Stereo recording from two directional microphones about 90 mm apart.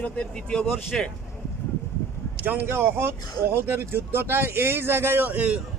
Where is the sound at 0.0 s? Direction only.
10° left (ahead or behind).